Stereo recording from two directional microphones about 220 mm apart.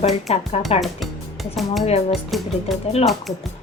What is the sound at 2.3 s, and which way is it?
Speech, centre (ahead or behind).